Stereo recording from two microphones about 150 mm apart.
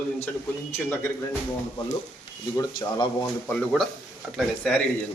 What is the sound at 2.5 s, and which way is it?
Speech, 25° left (ahead or behind).